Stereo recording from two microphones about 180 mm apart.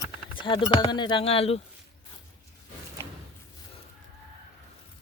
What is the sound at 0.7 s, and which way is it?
Speech, 25° left (ahead or behind).